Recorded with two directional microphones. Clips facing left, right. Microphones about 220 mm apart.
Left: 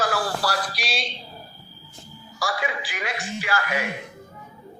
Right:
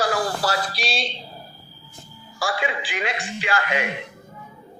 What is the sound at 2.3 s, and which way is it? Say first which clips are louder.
A man's voice: right 2 dB; 25° right (ahead or behind).